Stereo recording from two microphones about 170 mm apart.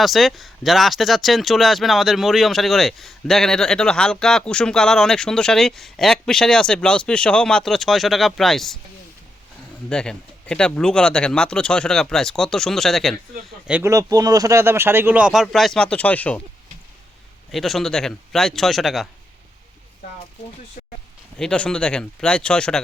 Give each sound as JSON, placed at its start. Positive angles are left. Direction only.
{"t": 0.0, "sound": "speech", "side_deg": 0}
{"t": 9.9, "sound": "speech", "side_deg": 5}
{"t": 13.9, "sound": "speech", "side_deg": -20}
{"t": 17.5, "sound": "speech", "side_deg": 0}
{"t": 20.8, "sound": "a sound", "side_deg": 50}
{"t": 21.3, "sound": "speech", "side_deg": 5}